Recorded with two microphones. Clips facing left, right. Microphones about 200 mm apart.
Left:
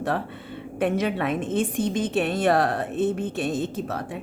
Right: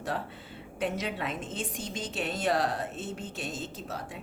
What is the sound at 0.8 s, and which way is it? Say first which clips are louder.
A woman's voice: left 8 dB; 55° left (ahead or behind).